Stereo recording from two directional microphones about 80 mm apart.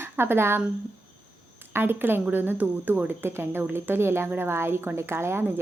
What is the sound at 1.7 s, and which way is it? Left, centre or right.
A woman's voice, right.